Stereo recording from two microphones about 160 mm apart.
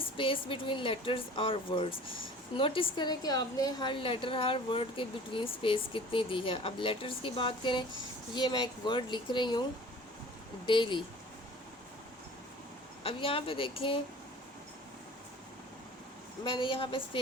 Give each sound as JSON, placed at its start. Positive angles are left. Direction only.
{"t": 0.2, "sound": "a woman's voice", "side_deg": 35}
{"t": 10.7, "sound": "a woman's voice", "side_deg": 30}
{"t": 13.0, "sound": "a woman's voice", "side_deg": 35}
{"t": 16.4, "sound": "a woman's voice", "side_deg": 30}